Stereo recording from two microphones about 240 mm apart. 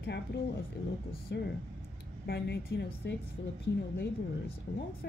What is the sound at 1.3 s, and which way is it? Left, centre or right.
Speech, left.